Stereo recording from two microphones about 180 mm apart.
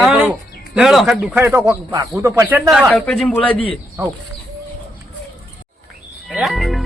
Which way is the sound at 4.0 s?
15° right (ahead or behind).